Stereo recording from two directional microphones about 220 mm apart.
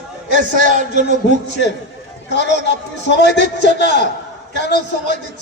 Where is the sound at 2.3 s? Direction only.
50° left (ahead or behind).